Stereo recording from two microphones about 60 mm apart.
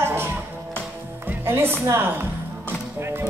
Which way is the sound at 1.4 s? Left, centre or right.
Right.